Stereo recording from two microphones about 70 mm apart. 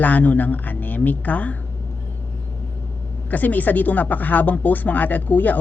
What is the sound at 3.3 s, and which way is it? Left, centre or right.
Speech, left.